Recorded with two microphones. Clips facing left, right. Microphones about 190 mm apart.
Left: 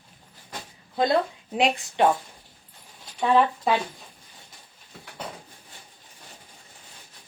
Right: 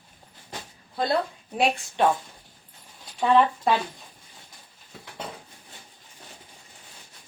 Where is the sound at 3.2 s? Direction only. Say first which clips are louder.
Right 1 dB; centre (ahead or behind).